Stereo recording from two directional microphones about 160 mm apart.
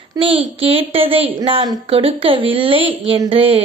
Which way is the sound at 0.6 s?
35° right (ahead or behind).